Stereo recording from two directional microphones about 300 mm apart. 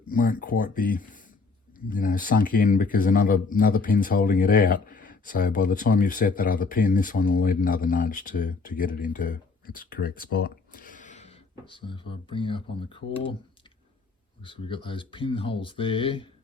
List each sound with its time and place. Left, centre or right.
0.1 s speech: left
14.4 s speech: centre